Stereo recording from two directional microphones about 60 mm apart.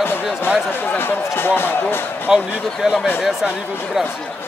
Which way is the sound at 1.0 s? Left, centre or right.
Left.